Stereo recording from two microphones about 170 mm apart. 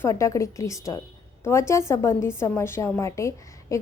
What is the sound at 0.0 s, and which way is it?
A woman's voice, 15° left (ahead or behind).